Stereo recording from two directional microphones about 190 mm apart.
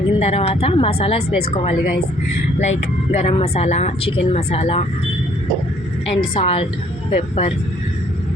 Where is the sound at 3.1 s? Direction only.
30° left (ahead or behind).